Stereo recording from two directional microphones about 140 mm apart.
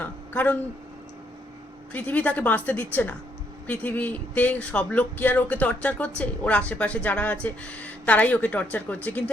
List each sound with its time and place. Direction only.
0.0 s speech: 10° left (ahead or behind)
1.9 s speech: 10° left (ahead or behind)